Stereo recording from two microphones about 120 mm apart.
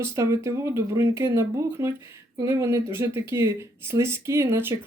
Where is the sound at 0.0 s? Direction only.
25° right (ahead or behind).